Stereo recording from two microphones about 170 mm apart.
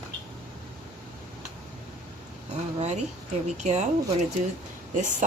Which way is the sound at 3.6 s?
40° right (ahead or behind).